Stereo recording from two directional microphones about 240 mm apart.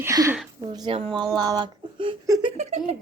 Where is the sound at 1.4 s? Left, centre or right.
Centre.